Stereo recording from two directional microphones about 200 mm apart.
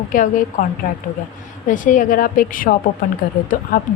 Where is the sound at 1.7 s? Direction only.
40° left (ahead or behind).